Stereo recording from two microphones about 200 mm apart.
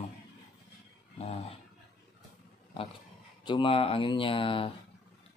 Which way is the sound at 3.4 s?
25° left (ahead or behind).